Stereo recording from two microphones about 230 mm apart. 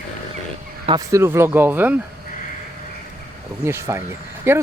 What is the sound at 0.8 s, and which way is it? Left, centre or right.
Speech, centre.